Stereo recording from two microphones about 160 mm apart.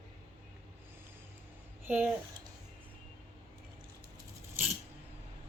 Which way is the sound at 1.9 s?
10° right (ahead or behind).